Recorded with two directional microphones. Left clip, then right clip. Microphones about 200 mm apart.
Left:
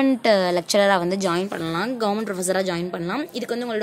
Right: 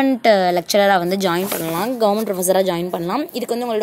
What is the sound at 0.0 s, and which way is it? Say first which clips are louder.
Speech: right 4 dB; 10° right (ahead or behind).